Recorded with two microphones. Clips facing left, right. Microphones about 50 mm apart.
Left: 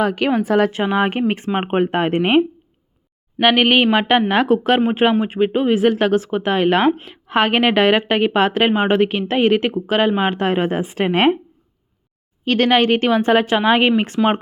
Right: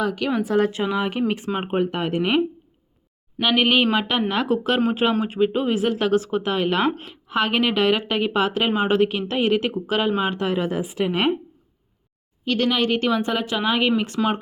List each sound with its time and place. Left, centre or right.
0.0 s a woman's voice: left
3.4 s a woman's voice: left
12.5 s a woman's voice: left